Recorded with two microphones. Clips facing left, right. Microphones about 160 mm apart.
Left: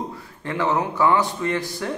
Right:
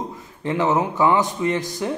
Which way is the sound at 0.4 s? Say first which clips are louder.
Right 3 dB; 20° right (ahead or behind).